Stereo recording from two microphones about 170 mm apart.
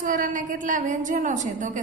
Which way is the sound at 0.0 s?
50° right (ahead or behind).